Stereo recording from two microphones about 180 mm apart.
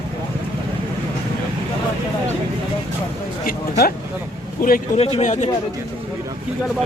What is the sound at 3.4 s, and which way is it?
Speech, 55° left (ahead or behind).